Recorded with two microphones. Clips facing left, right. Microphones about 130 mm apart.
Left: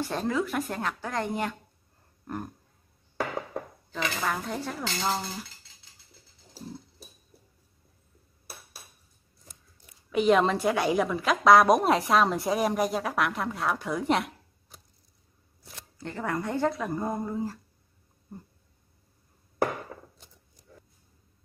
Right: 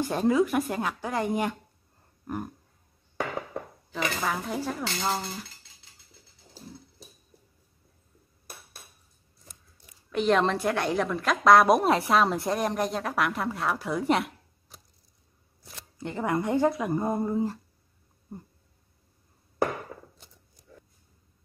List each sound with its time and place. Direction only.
0.1 s speech: 10° right (ahead or behind)
2.2 s a sound: 10° right (ahead or behind)
3.9 s a woman's voice: 5° right (ahead or behind)
10.1 s a woman's voice: 5° left (ahead or behind)
16.0 s speech: 15° right (ahead or behind)